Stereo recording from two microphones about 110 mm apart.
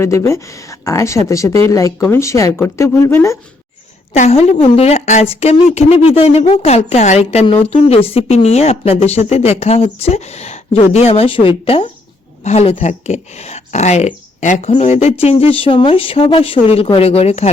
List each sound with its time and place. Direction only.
0.0 s speech: 25° left (ahead or behind)
4.1 s a woman's voice: 70° left (ahead or behind); by 7.4 s 85° left
7.4 s speech: 60° left (ahead or behind)
11.1 s speech: 50° left (ahead or behind)
12.5 s speech: 90° left; by 17.5 s 75° left (ahead or behind)